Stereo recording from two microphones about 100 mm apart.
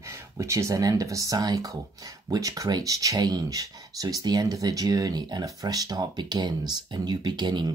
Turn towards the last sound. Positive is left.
turn(degrees=-50)  # may be behind; listen again after turning